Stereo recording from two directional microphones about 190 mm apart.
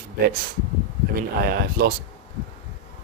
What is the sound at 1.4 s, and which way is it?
Speech, 50° right (ahead or behind).